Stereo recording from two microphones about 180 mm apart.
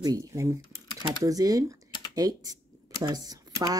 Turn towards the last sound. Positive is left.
turn(degrees=-20)  # may be behind; listen again after turning